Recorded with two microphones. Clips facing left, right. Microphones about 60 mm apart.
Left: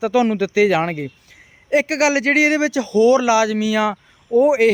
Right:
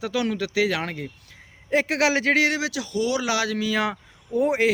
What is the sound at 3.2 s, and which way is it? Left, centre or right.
Speech, centre.